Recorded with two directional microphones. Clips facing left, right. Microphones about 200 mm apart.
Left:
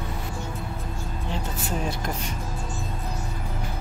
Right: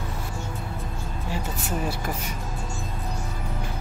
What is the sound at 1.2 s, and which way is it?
Vehicle, 10° right (ahead or behind).